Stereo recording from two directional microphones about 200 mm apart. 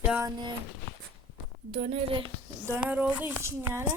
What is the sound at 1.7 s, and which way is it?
Speech, 30° right (ahead or behind).